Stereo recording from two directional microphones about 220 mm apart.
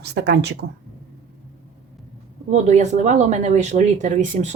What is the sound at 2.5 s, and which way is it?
Speech, 30° right (ahead or behind).